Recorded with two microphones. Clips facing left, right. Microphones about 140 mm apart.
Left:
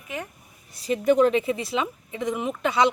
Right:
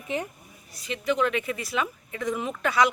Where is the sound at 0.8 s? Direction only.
45° left (ahead or behind).